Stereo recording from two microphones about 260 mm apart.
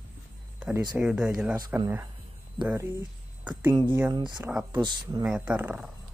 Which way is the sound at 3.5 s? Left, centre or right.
Centre.